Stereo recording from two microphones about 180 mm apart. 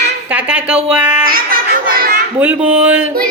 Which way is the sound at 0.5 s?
5° right (ahead or behind).